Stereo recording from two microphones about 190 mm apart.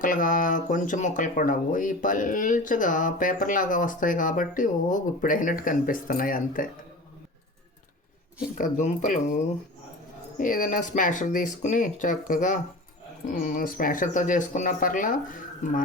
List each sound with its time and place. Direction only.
0.0 s speech: 45° left (ahead or behind)
8.5 s speech: 40° left (ahead or behind)